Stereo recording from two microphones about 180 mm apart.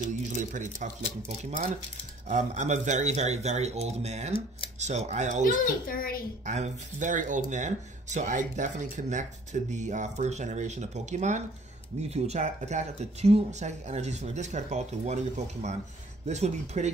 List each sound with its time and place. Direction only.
0.0 s speech: 45° right (ahead or behind)
2.2 s speech: 40° right (ahead or behind)
5.9 s a child's voice: 50° left (ahead or behind)
6.4 s speech: 40° right (ahead or behind)